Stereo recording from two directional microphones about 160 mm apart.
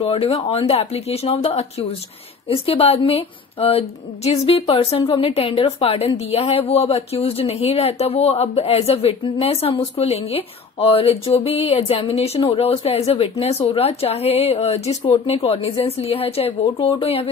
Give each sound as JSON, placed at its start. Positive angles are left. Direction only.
{"t": 0.0, "sound": "speech", "side_deg": 35}